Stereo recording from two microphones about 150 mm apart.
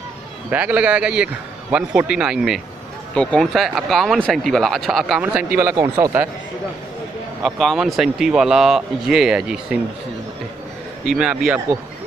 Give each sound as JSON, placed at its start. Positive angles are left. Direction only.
{"t": 0.5, "sound": "a man's voice", "side_deg": -10}
{"t": 5.6, "sound": "a man's voice", "side_deg": -15}
{"t": 7.4, "sound": "speech", "side_deg": 0}
{"t": 11.1, "sound": "a man's voice", "side_deg": -5}